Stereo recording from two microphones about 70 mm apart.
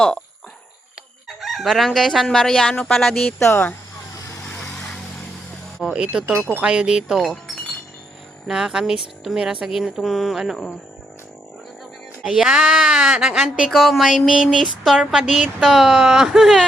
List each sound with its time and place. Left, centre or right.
1.4 s chicken: centre
2.2 s speech: centre
3.4 s speech: left
5.9 s speech: centre
12.2 s speech: centre
13.7 s speech: centre